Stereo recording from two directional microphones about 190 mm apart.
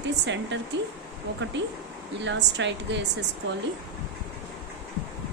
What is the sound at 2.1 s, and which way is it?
A woman's voice, 65° right (ahead or behind).